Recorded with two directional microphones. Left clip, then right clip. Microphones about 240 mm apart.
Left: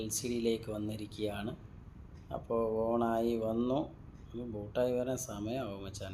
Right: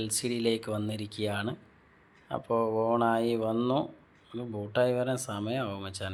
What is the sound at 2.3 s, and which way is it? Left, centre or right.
Speech, right.